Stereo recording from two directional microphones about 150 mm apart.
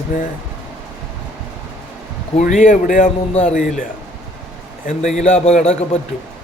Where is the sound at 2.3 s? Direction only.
55° left (ahead or behind).